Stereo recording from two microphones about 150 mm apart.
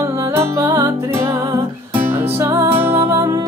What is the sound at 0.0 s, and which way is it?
Music, 20° right (ahead or behind).